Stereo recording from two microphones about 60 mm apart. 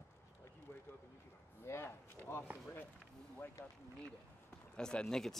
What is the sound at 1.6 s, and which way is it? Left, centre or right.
Speech, left.